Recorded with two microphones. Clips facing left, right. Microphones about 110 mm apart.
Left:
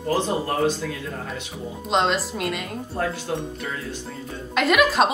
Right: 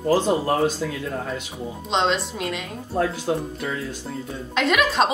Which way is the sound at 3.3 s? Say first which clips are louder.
Right 4 dB; 30° right (ahead or behind).